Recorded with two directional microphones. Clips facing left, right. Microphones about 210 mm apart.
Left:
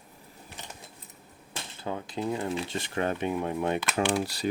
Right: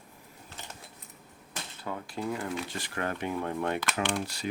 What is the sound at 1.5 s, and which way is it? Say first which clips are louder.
Speech: left 3 dB; 25° left (ahead or behind).